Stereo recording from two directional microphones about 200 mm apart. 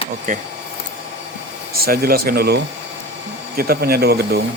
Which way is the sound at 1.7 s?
50° right (ahead or behind).